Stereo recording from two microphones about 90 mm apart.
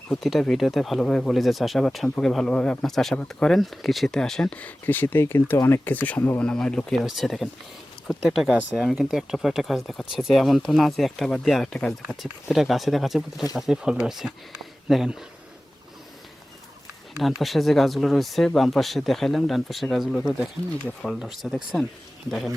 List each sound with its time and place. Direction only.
0.2 s speech: centre (ahead or behind); by 6.4 s 20° left (ahead or behind)
6.4 s speech: 10° left (ahead or behind)
17.2 s speech: centre (ahead or behind)